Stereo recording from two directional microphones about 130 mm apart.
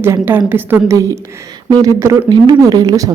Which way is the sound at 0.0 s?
15° right (ahead or behind).